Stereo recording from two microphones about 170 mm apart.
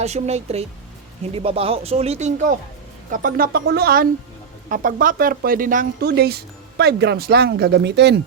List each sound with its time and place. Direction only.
0.0 s speech: 40° right (ahead or behind)
3.1 s speech: 55° right (ahead or behind); by 8.2 s 85° right